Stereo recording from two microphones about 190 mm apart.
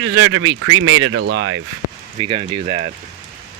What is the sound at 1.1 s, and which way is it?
Speech, 70° right (ahead or behind).